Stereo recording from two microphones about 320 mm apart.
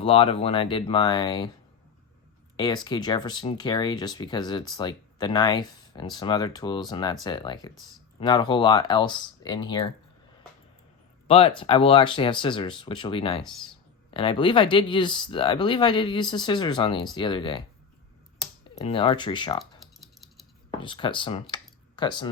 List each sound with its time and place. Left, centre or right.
0.0 s speech: centre
2.6 s speech: centre
11.3 s speech: centre
18.9 s speech: centre
19.8 s frog: centre
20.7 s speech: centre
21.5 s a sound: centre